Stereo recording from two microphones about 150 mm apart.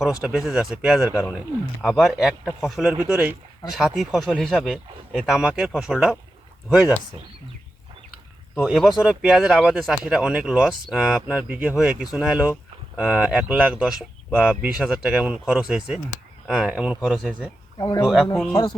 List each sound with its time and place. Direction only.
0.2 s speech: 5° right (ahead or behind)
1.0 s speech: 20° left (ahead or behind)
1.3 s speech: 5° right (ahead or behind)
3.0 s speech: 10° right (ahead or behind)
8.5 s speech: centre (ahead or behind)
17.7 s speech: 25° left (ahead or behind)
18.0 s speech: centre (ahead or behind)